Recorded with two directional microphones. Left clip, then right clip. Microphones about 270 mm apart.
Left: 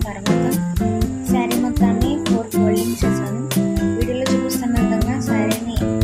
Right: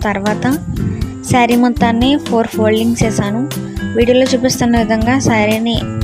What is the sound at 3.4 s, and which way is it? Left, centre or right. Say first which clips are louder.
Speech: left 3 dB; centre.